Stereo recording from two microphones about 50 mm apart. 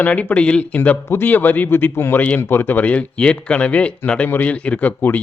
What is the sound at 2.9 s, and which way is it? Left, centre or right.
A man's voice, left.